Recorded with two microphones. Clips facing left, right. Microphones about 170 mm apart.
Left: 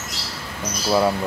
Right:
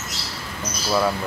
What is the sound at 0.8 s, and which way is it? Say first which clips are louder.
Speech: left 3 dB; 20° left (ahead or behind).